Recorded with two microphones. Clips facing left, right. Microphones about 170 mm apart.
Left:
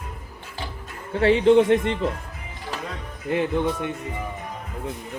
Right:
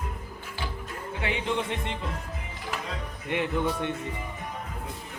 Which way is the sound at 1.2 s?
65° left (ahead or behind).